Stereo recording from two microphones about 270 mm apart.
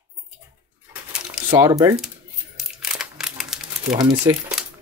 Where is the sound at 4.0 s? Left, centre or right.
Centre.